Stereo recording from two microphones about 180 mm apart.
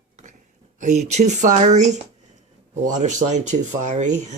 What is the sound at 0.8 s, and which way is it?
Speech, 40° right (ahead or behind).